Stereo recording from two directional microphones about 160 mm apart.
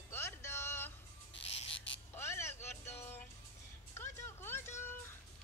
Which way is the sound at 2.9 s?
15° left (ahead or behind).